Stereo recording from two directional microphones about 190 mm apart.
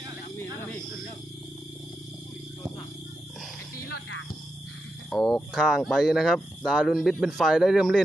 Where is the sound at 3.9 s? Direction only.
60° left (ahead or behind).